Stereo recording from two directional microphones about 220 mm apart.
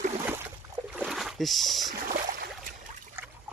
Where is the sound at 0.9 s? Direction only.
Centre (ahead or behind).